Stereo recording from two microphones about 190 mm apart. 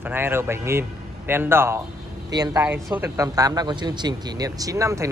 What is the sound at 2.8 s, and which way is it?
Speech, 10° right (ahead or behind).